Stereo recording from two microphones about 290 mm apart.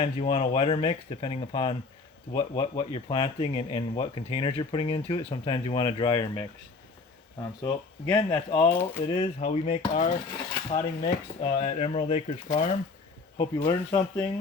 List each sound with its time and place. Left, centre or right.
0.0 s speech: left
7.6 s speech: centre
9.1 s speech: left